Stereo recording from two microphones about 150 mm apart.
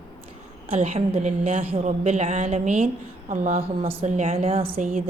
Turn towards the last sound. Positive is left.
turn(degrees=-60)  # may be behind; listen again after turning